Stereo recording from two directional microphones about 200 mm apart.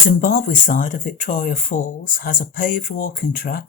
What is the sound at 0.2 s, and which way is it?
Speech, 45° left (ahead or behind).